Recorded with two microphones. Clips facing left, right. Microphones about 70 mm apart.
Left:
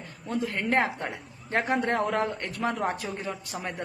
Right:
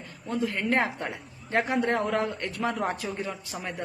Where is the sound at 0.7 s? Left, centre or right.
Left.